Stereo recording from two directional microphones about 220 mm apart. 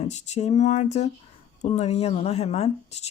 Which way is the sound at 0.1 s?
30° left (ahead or behind).